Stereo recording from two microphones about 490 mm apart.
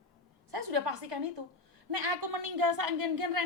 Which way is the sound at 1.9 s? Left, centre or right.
Right.